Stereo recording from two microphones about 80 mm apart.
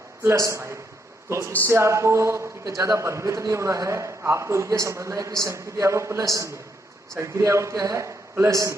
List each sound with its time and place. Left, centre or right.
0.2 s a man's voice: right